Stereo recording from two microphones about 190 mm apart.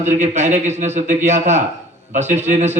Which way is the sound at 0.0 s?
35° right (ahead or behind).